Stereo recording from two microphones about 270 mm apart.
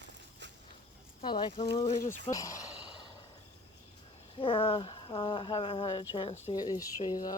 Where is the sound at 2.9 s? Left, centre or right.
Centre.